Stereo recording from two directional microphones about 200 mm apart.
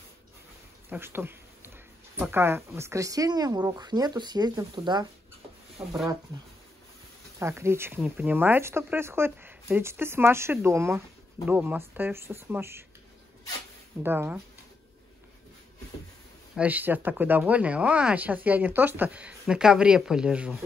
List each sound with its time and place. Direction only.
0.8 s a sound: 10° right (ahead or behind)
2.1 s speech: 10° right (ahead or behind)
5.8 s speech: 5° right (ahead or behind)
7.3 s speech: 15° right (ahead or behind)
14.0 s speech: 10° right (ahead or behind)
16.5 s speech: 10° right (ahead or behind)